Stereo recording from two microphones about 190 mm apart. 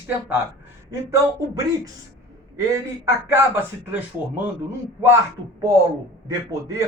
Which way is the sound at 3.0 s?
10° right (ahead or behind).